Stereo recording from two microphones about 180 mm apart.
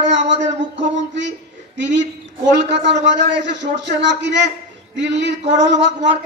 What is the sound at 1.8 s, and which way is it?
Speech, 80° right.